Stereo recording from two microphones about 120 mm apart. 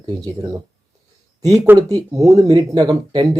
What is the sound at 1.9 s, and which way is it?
Speech, 25° right (ahead or behind).